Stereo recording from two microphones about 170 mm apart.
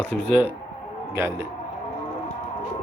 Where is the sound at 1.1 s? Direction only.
15° right (ahead or behind).